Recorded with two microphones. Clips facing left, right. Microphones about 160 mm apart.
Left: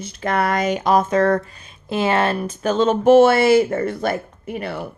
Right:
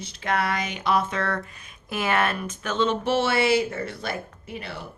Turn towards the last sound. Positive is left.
turn(degrees=50)  # may be behind; listen again after turning